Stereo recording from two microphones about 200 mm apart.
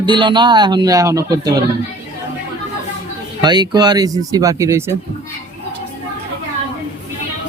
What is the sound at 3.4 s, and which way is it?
Speech, 20° right (ahead or behind).